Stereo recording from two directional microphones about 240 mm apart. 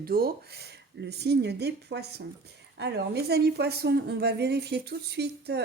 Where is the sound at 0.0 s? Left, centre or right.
Right.